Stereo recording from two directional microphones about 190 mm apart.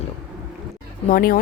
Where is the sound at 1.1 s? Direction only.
50° left (ahead or behind).